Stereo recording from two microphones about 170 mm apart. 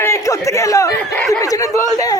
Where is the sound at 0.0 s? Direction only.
15° left (ahead or behind).